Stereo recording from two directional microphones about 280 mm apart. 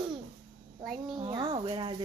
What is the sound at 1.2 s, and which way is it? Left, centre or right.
Speech, centre.